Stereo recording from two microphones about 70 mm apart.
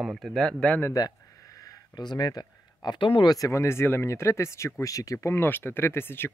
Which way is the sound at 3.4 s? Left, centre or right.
Left.